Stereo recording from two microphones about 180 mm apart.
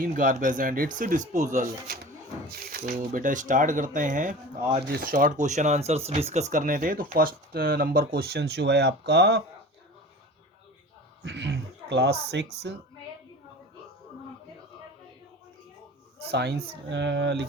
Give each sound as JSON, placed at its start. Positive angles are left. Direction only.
{"t": 0.0, "sound": "speech", "side_deg": -50}
{"t": 11.2, "sound": "a sound", "side_deg": -70}
{"t": 12.4, "sound": "speech", "side_deg": -80}
{"t": 16.3, "sound": "speech", "side_deg": -70}